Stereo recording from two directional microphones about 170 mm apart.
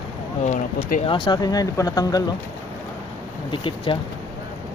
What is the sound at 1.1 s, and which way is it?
Speech, 25° left (ahead or behind).